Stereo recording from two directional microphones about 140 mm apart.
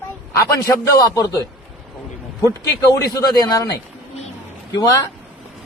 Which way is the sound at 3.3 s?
30° left (ahead or behind).